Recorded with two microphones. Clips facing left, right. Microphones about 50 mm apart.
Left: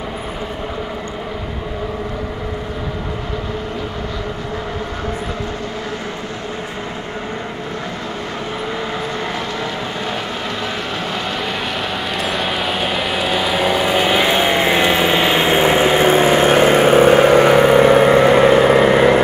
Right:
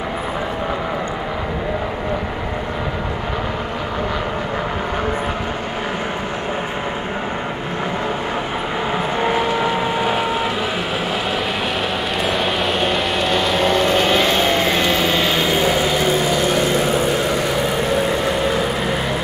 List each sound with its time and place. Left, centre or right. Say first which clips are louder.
9.2 s vehicle: right 5 dB; centre
12.2 s vehicle: right 1 dB; centre; by 19.2 s left